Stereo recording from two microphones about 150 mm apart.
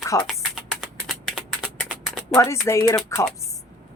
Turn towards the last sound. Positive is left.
turn(degrees=20)  # may be behind; listen again after turning